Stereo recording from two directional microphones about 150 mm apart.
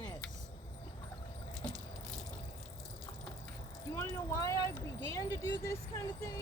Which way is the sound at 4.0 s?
20° left (ahead or behind).